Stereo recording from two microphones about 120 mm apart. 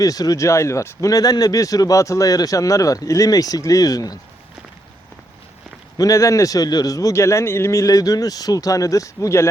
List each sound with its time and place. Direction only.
0.0 s speech: 30° left (ahead or behind)
6.0 s speech: 25° left (ahead or behind)